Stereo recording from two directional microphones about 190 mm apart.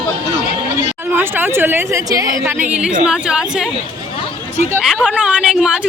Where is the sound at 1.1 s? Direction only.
10° right (ahead or behind).